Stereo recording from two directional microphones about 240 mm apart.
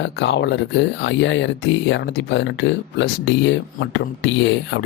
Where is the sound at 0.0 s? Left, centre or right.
Left.